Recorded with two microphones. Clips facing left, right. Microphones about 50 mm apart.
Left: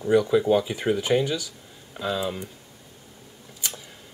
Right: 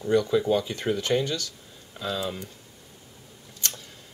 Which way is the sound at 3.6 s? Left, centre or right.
Centre.